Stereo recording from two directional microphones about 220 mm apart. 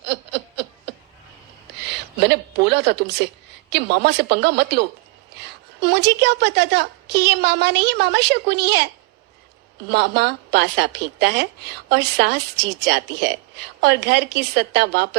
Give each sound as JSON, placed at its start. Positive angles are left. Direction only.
{"t": 0.0, "sound": "snicker", "side_deg": -50}
{"t": 1.8, "sound": "a woman's voice", "side_deg": -50}